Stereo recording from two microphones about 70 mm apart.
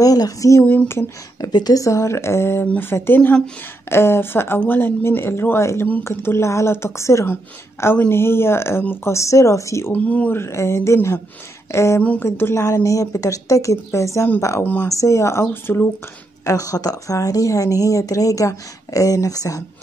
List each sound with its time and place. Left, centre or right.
0.0 s a woman's voice: left
0.8 s speech: left
1.4 s a woman's voice: left
3.2 s speech: centre
3.9 s speech: left
8.1 s a woman's voice: left
9.9 s speech: left
10.3 s a woman's voice: left
14.6 s speech: left
14.9 s a woman's voice: left
16.4 s a woman's voice: left